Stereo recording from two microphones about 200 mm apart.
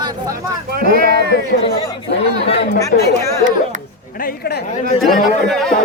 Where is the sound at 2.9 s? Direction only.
35° left (ahead or behind).